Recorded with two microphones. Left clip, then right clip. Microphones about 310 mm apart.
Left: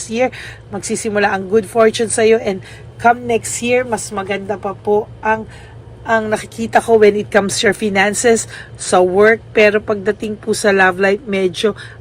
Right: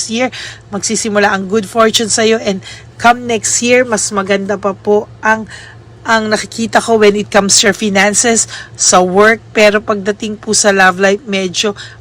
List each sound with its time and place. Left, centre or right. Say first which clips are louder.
0.1 s speech: left 3 dB; centre
3.6 s speech: right 5 dB; right
6.1 s speech: right 4 dB; centre